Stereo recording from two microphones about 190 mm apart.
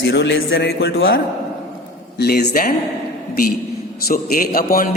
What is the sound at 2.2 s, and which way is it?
Speech, 55° left (ahead or behind).